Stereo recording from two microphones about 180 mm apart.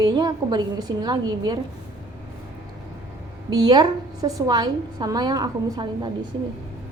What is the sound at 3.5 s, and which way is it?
A woman's voice, 20° right (ahead or behind).